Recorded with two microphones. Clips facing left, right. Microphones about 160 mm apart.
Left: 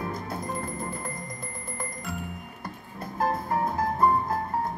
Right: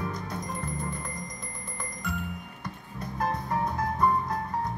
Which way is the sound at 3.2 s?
25° left (ahead or behind).